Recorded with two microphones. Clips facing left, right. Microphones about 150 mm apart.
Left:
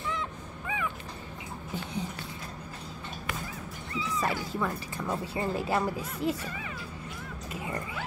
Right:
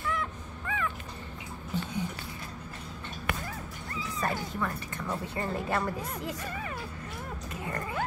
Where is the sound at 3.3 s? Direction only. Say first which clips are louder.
Right 3 dB; 60° right (ahead or behind).